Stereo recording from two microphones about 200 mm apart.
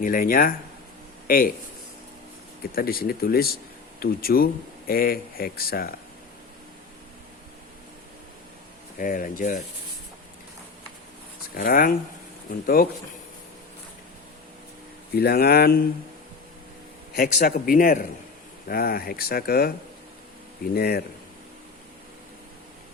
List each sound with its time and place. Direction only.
0.0 s speech: 45° left (ahead or behind)
2.7 s speech: 50° left (ahead or behind)
9.0 s speech: 45° left (ahead or behind)
11.5 s speech: 45° left (ahead or behind)
15.1 s speech: 50° left (ahead or behind)
17.2 s speech: 45° left (ahead or behind)
20.7 s speech: 50° left (ahead or behind)